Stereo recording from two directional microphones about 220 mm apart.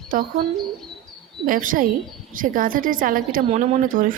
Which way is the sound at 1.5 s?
40° right (ahead or behind).